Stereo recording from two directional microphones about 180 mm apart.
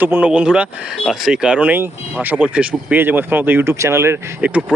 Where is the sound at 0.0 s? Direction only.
10° right (ahead or behind).